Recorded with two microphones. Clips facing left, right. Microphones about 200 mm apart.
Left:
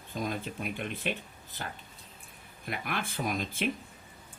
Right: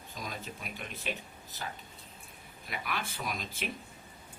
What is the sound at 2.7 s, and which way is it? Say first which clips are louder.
Speech: left 3 dB; 55° left (ahead or behind).